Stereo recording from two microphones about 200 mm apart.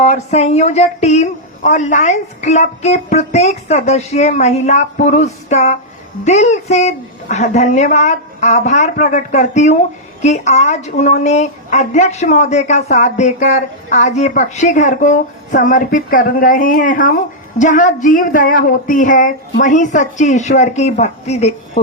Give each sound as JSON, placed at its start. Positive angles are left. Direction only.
{"t": 0.0, "sound": "speech", "side_deg": 30}